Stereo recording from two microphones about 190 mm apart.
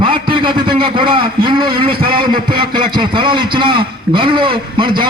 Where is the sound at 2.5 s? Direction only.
25° right (ahead or behind).